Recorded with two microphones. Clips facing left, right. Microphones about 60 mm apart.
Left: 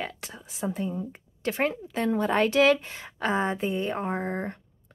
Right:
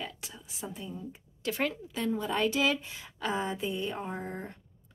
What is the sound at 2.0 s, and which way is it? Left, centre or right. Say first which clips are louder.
A woman's voice: left 5 dB; left.